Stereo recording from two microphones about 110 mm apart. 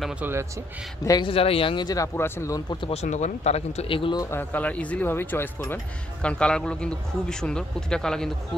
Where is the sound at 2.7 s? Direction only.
50° left (ahead or behind).